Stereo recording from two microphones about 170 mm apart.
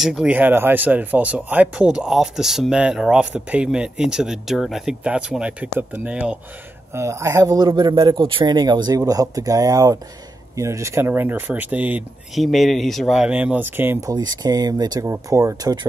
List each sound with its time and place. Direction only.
0.0 s speech: 5° right (ahead or behind)
14.1 s speech: 25° right (ahead or behind)